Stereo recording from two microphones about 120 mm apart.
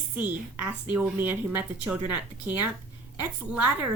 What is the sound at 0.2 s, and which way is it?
A woman's voice, 15° right (ahead or behind).